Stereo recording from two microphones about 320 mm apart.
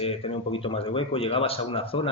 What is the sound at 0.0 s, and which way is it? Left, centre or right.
Speech, centre.